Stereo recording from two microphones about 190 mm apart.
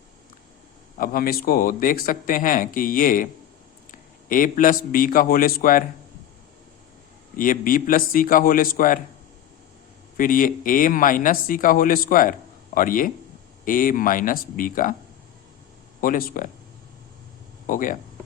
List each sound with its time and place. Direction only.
0.9 s a man's voice: 50° left (ahead or behind)
7.3 s speech: 45° left (ahead or behind)
10.2 s speech: 45° left (ahead or behind)
16.0 s speech: 50° left (ahead or behind)
17.7 s speech: 45° left (ahead or behind)